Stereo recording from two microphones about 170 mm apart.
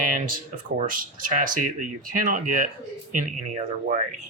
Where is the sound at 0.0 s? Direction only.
50° right (ahead or behind).